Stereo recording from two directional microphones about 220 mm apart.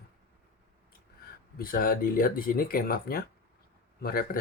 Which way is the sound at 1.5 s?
40° left (ahead or behind).